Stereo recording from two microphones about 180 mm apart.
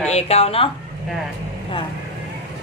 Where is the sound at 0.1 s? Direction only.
35° left (ahead or behind).